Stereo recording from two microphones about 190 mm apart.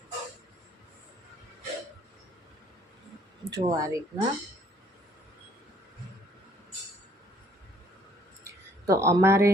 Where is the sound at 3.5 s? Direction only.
20° right (ahead or behind).